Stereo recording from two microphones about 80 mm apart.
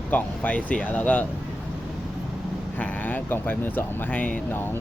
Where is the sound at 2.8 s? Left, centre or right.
Left.